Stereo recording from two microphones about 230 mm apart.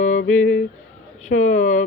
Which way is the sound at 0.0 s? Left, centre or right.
Left.